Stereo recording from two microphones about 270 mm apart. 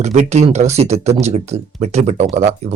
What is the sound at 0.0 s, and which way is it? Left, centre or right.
Speech, right.